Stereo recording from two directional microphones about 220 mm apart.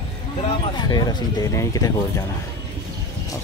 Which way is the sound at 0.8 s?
20° left (ahead or behind).